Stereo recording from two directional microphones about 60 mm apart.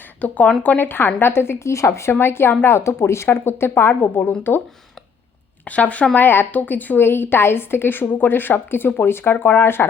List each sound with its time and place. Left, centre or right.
0.2 s a woman's voice: left
1.5 s speech: left
2.7 s speech: left
4.2 s speech: left
5.6 s a woman's voice: left